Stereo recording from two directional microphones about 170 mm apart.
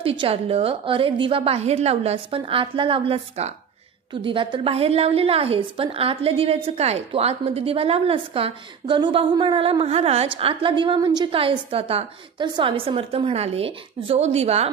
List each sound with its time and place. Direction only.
0.0 s a woman's voice: 30° right (ahead or behind)